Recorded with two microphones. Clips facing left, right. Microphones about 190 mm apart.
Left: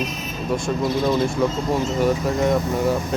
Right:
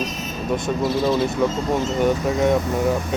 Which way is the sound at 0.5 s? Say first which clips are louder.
Even; 5° right (ahead or behind).